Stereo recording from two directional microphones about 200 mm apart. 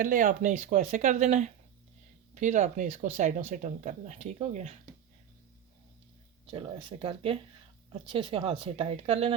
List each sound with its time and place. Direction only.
0.0 s speech: 40° right (ahead or behind)
6.5 s speech: 25° right (ahead or behind)